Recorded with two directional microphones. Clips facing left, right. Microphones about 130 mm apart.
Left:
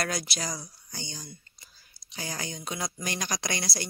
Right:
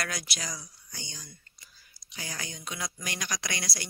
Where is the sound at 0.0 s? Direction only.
35° left (ahead or behind).